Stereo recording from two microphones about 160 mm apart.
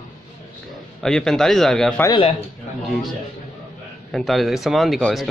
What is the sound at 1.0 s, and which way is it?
Speech, 5° left (ahead or behind).